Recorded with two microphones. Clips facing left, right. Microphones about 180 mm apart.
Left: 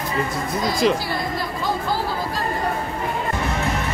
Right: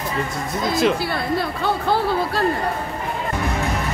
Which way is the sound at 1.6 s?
65° right (ahead or behind).